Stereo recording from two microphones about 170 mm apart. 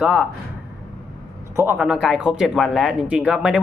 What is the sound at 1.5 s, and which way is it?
Speech, 15° right (ahead or behind).